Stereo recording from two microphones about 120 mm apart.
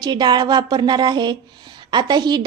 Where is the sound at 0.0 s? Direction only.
35° right (ahead or behind).